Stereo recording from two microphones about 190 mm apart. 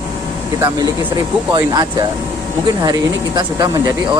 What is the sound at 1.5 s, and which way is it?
Speech, 20° right (ahead or behind).